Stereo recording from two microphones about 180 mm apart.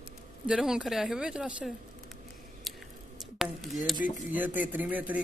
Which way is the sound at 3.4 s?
5° right (ahead or behind).